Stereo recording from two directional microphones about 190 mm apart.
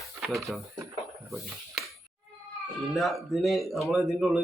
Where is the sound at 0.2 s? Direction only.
Centre (ahead or behind).